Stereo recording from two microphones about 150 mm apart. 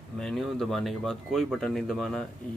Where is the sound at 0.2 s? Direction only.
5° left (ahead or behind).